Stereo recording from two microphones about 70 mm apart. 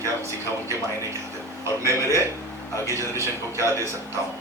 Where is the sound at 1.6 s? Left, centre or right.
Right.